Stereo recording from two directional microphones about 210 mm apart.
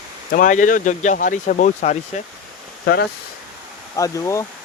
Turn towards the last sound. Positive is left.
turn(degrees=15)  # may be behind; listen again after turning